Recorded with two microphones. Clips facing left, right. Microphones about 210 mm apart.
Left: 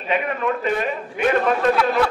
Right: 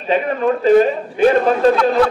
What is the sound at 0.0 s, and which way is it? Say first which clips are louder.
A man's voice: right 6 dB; 35° right (ahead or behind).